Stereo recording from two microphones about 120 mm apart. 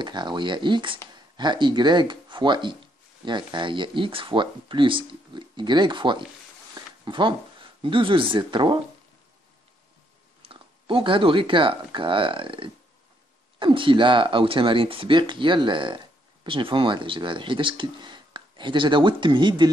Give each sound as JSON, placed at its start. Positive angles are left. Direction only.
{"t": 0.0, "sound": "speech", "side_deg": -40}
{"t": 6.8, "sound": "a sound", "side_deg": -40}
{"t": 7.1, "sound": "speech", "side_deg": -45}
{"t": 10.4, "sound": "speech", "side_deg": -50}